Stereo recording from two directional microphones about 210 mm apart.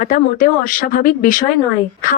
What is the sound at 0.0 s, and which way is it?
Speech, 40° left (ahead or behind).